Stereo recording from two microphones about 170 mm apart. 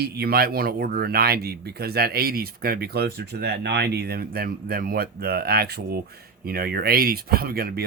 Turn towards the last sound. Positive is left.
turn(degrees=-65)  # may be behind; listen again after turning